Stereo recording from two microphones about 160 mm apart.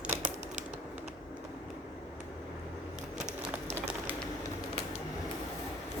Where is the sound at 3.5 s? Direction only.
10° right (ahead or behind).